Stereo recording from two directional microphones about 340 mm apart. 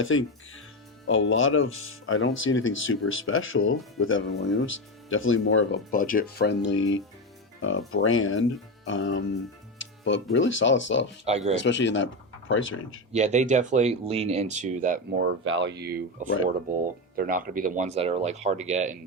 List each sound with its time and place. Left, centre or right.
0.0 s speech: left
5.9 s speech: left
9.7 s music: left
10.3 s speech: left
11.3 s speech: centre
11.5 s speech: left
13.1 s speech: right
15.2 s speech: right